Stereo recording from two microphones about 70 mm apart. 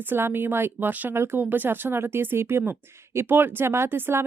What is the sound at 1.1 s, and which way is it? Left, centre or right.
Speech, right.